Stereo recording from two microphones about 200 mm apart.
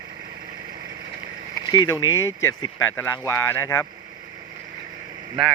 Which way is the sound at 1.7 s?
20° left (ahead or behind).